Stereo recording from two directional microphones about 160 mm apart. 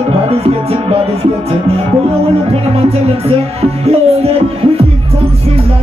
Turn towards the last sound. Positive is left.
turn(degrees=-40)  # may be behind; listen again after turning